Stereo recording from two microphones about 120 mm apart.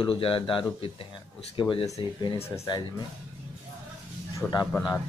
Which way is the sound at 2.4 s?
25° left (ahead or behind).